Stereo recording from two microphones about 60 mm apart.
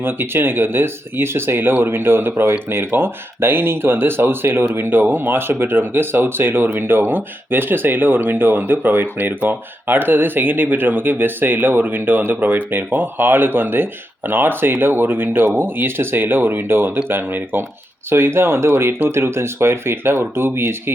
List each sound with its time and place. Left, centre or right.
0.0 s speech: right